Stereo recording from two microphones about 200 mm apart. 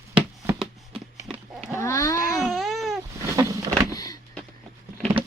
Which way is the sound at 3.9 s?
20° left (ahead or behind).